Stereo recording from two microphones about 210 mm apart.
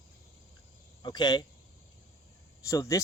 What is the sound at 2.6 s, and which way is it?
Speech, 15° left (ahead or behind).